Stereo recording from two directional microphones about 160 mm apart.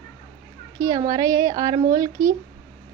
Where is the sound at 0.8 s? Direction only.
20° right (ahead or behind).